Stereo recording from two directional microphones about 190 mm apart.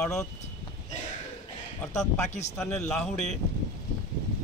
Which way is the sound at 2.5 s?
5° left (ahead or behind).